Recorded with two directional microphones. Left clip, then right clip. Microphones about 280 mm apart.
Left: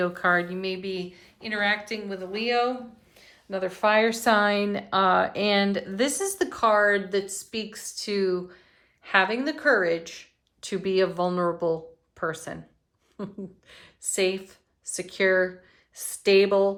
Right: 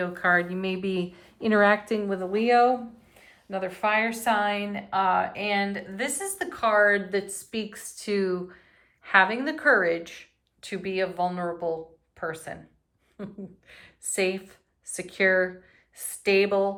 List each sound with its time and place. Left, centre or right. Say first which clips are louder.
0.0 s a woman's voice: even; centre